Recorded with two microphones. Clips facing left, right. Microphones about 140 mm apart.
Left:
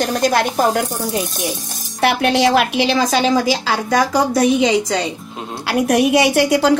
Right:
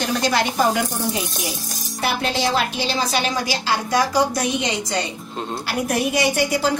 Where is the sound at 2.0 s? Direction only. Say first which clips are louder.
Left 7 dB; 75° left (ahead or behind).